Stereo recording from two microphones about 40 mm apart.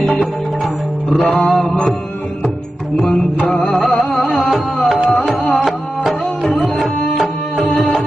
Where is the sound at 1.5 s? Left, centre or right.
Centre.